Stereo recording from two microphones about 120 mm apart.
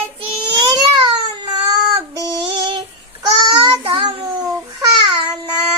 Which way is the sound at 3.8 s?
45° right (ahead or behind).